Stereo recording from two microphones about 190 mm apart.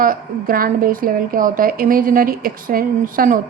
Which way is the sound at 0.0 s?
50° right (ahead or behind).